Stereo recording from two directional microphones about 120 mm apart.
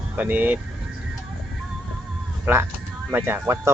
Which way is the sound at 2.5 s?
20° right (ahead or behind).